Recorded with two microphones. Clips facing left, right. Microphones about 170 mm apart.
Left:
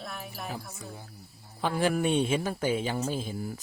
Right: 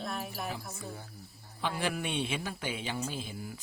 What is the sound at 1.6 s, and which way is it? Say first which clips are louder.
A man's voice: left 7 dB; 45° left (ahead or behind).